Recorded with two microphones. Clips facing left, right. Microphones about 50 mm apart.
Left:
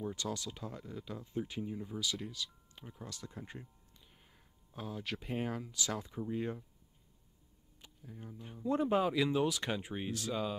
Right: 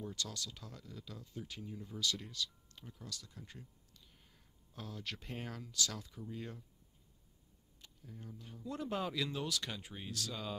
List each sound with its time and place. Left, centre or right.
0.0 s speech: left
2.0 s speech: centre; by 6.6 s left
7.8 s speech: centre